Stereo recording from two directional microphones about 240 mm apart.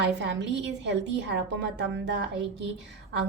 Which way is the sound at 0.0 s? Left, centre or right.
Right.